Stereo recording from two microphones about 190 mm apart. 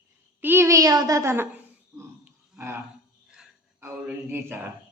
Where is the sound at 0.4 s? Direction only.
10° right (ahead or behind).